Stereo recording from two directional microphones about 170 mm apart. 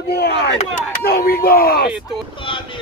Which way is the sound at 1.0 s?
65° left (ahead or behind).